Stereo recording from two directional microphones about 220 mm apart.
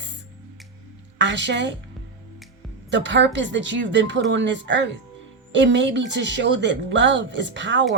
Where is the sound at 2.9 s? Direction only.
55° right (ahead or behind).